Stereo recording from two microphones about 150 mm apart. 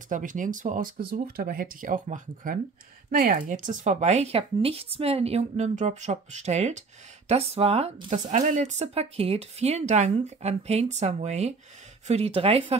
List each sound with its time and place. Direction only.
0.1 s speech: 60° right (ahead or behind); by 12.7 s 40° right (ahead or behind)